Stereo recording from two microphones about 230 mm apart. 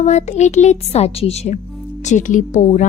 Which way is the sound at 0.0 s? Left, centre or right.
Left.